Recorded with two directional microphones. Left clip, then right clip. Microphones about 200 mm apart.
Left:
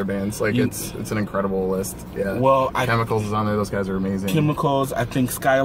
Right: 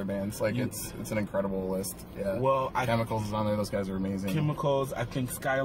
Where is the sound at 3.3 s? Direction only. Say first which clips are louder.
Left 7 dB; 15° right (ahead or behind).